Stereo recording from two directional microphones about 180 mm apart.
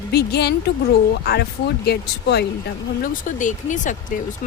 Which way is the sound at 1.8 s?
65° left (ahead or behind).